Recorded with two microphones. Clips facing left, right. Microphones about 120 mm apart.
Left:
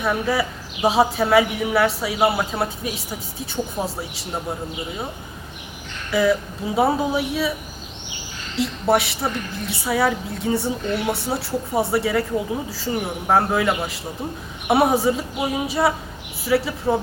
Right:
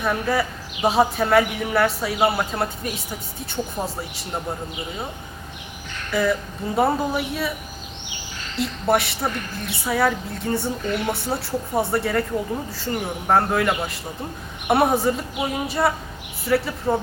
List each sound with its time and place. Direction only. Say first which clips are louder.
0.0 s a woman's voice: left 1 dB; centre (ahead or behind)
6.1 s a woman's voice: left 3 dB; centre (ahead or behind)
8.5 s a woman's voice: left 2 dB; centre (ahead or behind)